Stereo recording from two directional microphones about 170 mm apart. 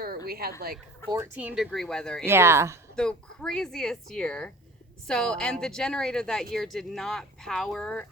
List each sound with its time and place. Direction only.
0.3 s a woman's voice: 65° right (ahead or behind)
1.1 s speech: 10° right (ahead or behind)
2.2 s speech: 15° right (ahead or behind)
2.9 s speech: 5° left (ahead or behind)